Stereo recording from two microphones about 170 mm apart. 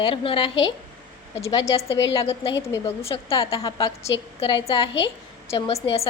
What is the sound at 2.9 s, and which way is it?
Speech, 35° left (ahead or behind).